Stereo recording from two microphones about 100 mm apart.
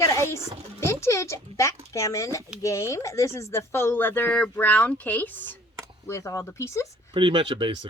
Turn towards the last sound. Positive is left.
turn(degrees=-55)  # may be behind; listen again after turning